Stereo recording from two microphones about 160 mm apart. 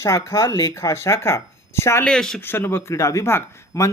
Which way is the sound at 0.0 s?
15° left (ahead or behind).